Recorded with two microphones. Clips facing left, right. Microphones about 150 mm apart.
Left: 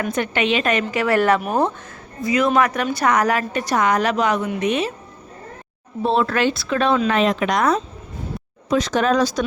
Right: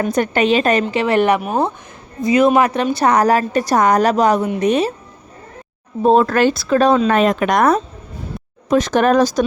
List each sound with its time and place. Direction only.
0.0 s a woman's voice: 40° right (ahead or behind); by 1.4 s 20° right (ahead or behind)
1.4 s speech: centre (ahead or behind)
2.2 s a woman's voice: 25° right (ahead or behind)
6.0 s speech: 45° right (ahead or behind)